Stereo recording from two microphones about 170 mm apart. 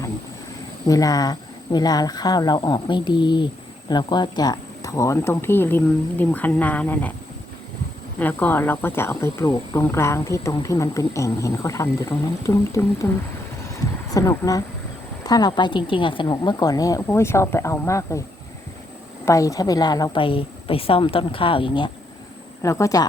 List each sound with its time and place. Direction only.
0.9 s a woman's voice: 20° left (ahead or behind)
8.2 s a woman's voice: 10° left (ahead or behind)
19.2 s a woman's voice: 20° left (ahead or behind)
22.6 s a woman's voice: 20° left (ahead or behind)